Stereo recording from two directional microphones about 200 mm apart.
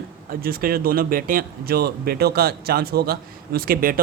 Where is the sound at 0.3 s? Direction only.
50° right (ahead or behind).